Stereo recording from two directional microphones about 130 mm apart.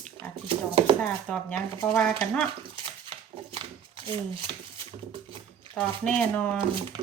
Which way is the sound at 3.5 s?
45° right (ahead or behind).